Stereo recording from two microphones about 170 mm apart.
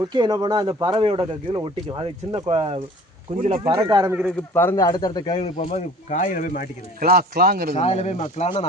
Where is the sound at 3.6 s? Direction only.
20° right (ahead or behind).